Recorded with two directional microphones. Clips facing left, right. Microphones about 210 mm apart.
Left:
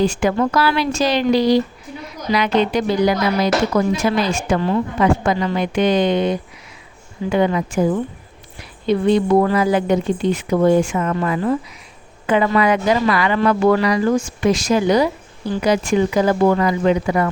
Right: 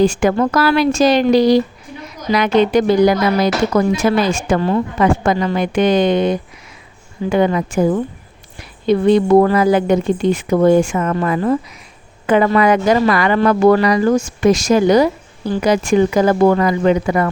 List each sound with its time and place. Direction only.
0.0 s a woman's voice: 50° right (ahead or behind)
8.9 s a woman's voice: 50° right (ahead or behind)